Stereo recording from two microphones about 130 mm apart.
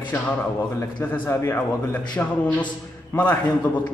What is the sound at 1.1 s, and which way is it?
A man's voice, 15° left (ahead or behind).